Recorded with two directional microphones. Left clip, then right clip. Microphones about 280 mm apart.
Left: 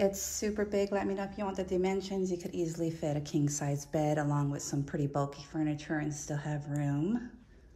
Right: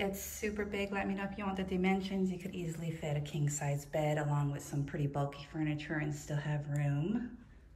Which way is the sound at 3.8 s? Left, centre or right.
Left.